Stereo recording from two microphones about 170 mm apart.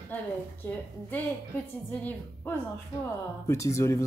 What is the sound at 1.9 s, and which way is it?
A woman's voice, 10° left (ahead or behind).